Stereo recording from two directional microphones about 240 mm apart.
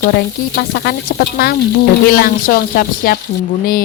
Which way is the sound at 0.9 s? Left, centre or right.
Left.